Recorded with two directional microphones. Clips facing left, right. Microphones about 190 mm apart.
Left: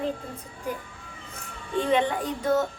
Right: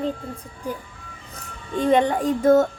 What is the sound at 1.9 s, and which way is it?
Speech, 45° right (ahead or behind).